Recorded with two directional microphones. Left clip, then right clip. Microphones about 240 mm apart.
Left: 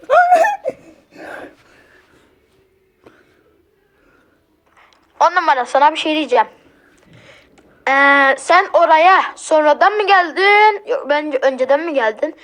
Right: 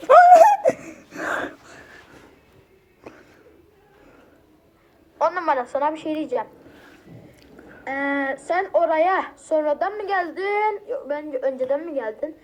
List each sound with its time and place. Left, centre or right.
0.0 s a sound: centre
5.1 s a woman's voice: left
7.9 s a woman's voice: left